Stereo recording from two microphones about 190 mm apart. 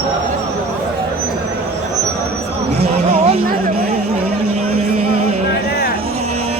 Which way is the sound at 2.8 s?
35° right (ahead or behind).